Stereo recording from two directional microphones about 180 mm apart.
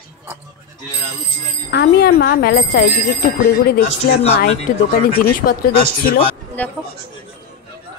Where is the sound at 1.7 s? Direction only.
60° left (ahead or behind).